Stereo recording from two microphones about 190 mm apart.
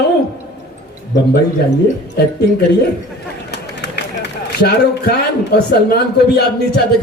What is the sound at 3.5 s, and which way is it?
A man's voice, 60° left (ahead or behind).